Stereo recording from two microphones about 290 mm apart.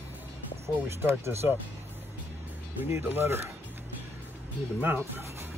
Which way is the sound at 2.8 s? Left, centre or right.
Centre.